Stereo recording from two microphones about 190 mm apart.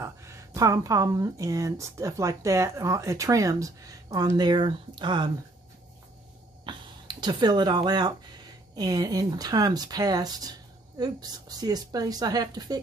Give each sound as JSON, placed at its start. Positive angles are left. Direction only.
{"t": 0.0, "sound": "speech", "side_deg": -15}
{"t": 6.6, "sound": "a sound", "side_deg": -25}
{"t": 8.7, "sound": "speech", "side_deg": -20}